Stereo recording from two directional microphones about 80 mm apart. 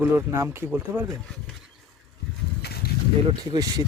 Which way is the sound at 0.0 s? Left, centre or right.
Right.